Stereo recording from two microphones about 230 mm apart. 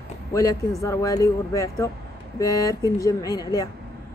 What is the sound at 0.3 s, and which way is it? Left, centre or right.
Speech, centre.